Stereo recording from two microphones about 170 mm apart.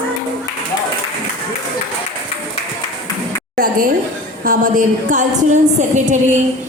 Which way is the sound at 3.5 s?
55° right (ahead or behind).